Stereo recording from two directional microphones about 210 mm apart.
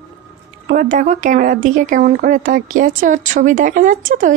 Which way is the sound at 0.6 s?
35° right (ahead or behind).